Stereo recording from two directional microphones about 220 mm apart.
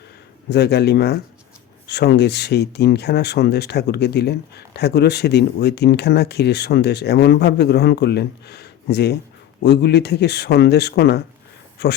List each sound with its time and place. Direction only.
0.5 s speech: 50° left (ahead or behind)